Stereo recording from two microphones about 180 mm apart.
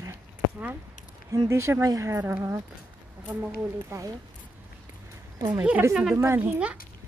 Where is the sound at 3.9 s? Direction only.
20° right (ahead or behind).